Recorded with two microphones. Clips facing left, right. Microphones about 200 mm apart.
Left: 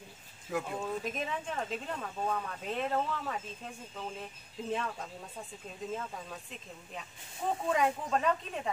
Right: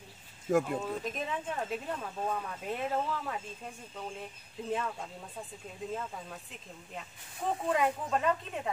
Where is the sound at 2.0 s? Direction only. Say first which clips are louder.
Even; centre (ahead or behind).